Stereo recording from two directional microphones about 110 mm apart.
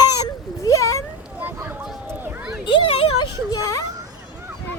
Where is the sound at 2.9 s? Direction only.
65° left (ahead or behind).